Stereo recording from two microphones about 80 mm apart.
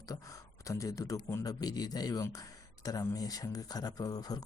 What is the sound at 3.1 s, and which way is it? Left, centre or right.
Speech, left.